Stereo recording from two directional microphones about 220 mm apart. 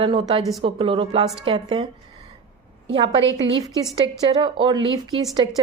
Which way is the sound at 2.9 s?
25° right (ahead or behind).